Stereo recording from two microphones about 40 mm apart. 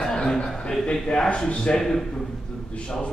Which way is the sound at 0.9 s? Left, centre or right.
Centre.